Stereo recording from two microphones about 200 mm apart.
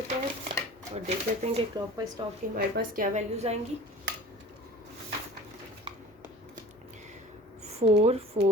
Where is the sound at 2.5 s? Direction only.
50° right (ahead or behind).